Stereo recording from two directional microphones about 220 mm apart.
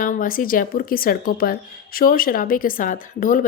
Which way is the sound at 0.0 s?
40° left (ahead or behind).